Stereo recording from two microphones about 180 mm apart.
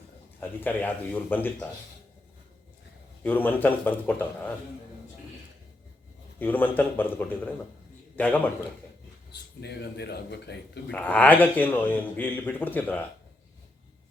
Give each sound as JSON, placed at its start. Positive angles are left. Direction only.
{"t": 0.3, "sound": "a man's voice", "side_deg": 10}
{"t": 3.2, "sound": "a man's voice", "side_deg": 10}
{"t": 6.4, "sound": "a man's voice", "side_deg": 10}
{"t": 9.3, "sound": "speech", "side_deg": 70}
{"t": 10.9, "sound": "a man's voice", "side_deg": 10}